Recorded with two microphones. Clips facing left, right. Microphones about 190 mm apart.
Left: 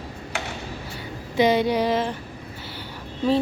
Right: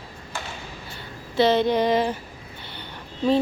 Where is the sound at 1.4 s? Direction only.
10° left (ahead or behind).